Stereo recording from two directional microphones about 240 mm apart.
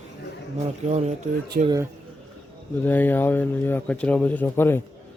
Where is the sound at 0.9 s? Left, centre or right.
Right.